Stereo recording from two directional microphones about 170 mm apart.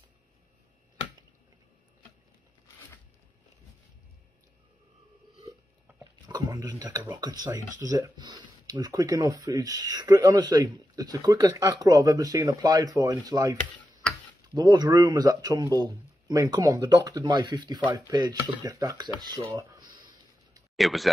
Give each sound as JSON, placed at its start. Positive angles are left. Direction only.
{"t": 5.9, "sound": "a sound", "side_deg": -10}
{"t": 6.2, "sound": "speech", "side_deg": -20}
{"t": 20.7, "sound": "speech", "side_deg": 0}